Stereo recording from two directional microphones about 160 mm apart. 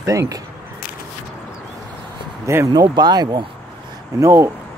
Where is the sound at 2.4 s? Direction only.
20° right (ahead or behind).